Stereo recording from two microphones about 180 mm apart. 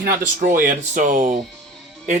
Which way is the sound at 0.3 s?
50° right (ahead or behind).